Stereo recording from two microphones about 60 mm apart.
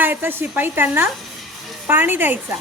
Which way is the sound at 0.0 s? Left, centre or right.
Right.